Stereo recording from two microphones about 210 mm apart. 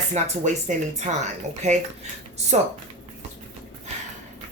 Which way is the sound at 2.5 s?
35° right (ahead or behind).